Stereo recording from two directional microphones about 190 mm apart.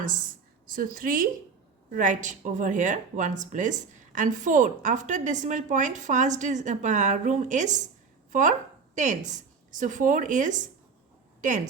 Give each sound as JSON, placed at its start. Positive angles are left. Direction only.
{"t": 0.7, "sound": "a woman's voice", "side_deg": -50}